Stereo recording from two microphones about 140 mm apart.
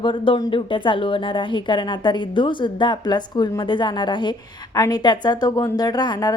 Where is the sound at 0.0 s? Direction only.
35° left (ahead or behind).